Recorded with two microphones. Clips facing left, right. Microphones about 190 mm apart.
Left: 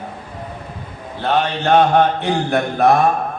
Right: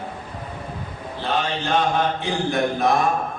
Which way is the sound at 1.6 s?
60° left (ahead or behind).